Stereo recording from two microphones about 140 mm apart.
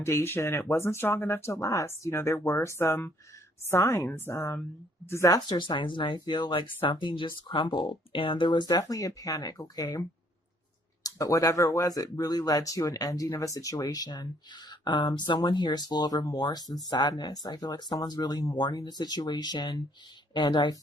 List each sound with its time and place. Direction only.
0.0 s speech: 20° left (ahead or behind)
11.0 s speech: 25° left (ahead or behind)